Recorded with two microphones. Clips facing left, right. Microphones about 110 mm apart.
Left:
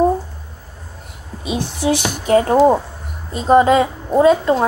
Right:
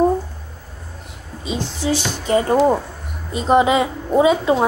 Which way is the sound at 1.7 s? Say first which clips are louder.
Left 3 dB; 15° left (ahead or behind).